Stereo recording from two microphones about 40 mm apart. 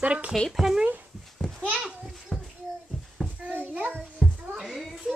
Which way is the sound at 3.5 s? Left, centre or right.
Right.